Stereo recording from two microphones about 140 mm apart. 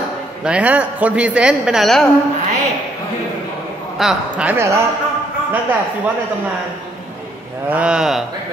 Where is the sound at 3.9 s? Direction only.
5° right (ahead or behind).